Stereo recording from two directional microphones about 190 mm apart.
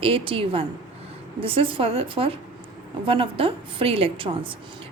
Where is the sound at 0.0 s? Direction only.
30° right (ahead or behind).